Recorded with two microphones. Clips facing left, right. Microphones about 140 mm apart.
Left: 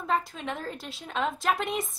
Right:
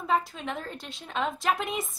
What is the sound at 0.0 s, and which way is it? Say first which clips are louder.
A woman's voice: right 1 dB; centre (ahead or behind).